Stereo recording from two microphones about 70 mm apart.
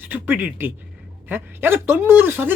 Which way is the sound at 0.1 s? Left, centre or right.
Right.